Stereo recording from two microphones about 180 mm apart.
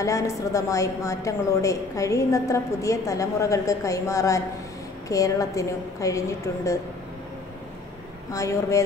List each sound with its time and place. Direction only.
0.0 s a woman's voice: 20° left (ahead or behind)
8.3 s a woman's voice: 15° left (ahead or behind)